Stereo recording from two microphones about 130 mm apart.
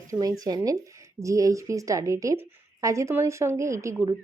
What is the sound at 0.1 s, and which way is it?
Speech, 25° right (ahead or behind).